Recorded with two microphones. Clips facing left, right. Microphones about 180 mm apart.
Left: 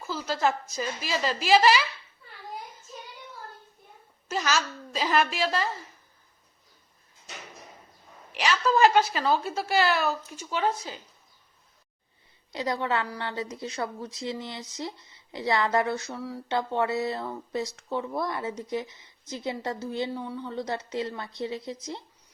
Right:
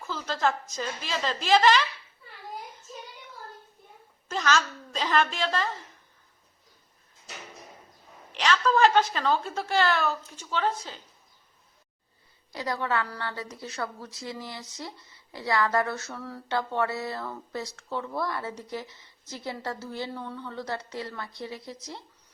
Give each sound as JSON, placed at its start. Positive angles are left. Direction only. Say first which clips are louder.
{"t": 0.0, "sound": "a sound", "louder": "left 1 dB", "side_deg": 10}
{"t": 0.8, "sound": "a woman's voice", "louder": "left 2 dB", "side_deg": 5}
{"t": 4.3, "sound": "a woman's voice", "louder": "right 1 dB", "side_deg": 10}
{"t": 8.3, "sound": "a woman's voice", "louder": "even", "side_deg": 10}
{"t": 12.5, "sound": "speech", "louder": "left 1 dB", "side_deg": 20}